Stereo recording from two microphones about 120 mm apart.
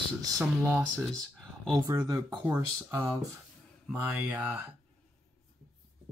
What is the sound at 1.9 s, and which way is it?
Speech, 35° right (ahead or behind).